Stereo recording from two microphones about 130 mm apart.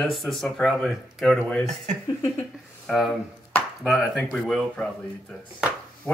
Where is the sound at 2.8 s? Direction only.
Centre (ahead or behind).